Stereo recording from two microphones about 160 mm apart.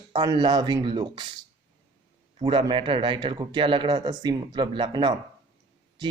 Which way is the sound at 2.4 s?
30° right (ahead or behind).